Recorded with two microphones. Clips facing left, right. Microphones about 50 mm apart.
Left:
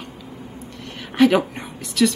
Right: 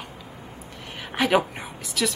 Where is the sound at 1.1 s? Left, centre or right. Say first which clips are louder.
Left 5 dB; centre.